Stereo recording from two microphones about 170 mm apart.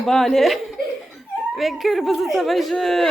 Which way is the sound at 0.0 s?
5° left (ahead or behind).